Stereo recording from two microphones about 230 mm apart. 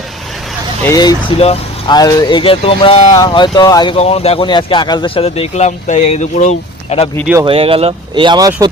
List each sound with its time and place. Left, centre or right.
0.9 s speech: centre
7.4 s speech: right